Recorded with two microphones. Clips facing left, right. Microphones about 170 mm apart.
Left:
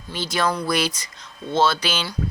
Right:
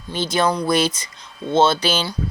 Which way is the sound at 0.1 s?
20° right (ahead or behind).